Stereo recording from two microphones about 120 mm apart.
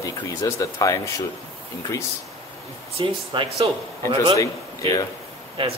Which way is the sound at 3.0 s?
55° right (ahead or behind).